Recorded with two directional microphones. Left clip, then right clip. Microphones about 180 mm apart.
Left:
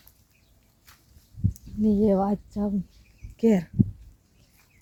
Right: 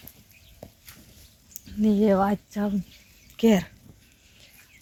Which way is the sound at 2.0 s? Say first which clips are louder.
Right 2 dB; 5° left (ahead or behind).